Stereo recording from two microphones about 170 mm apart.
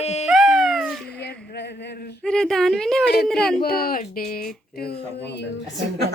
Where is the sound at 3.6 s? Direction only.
65° left (ahead or behind); by 5.4 s 80° left.